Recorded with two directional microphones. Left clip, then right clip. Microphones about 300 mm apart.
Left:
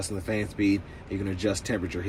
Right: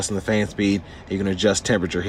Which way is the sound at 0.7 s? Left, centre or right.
Right.